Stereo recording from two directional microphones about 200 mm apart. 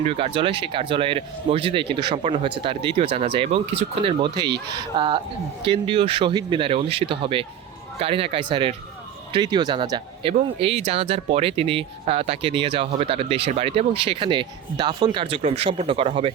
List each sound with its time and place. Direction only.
0.0 s speech: 30° right (ahead or behind)